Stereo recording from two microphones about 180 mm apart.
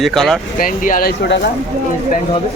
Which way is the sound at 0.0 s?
Centre (ahead or behind).